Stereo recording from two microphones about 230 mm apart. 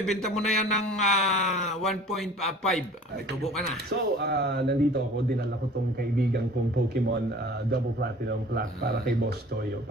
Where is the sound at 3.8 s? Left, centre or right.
Right.